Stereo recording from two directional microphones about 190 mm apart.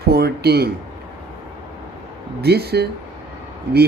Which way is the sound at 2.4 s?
55° right (ahead or behind).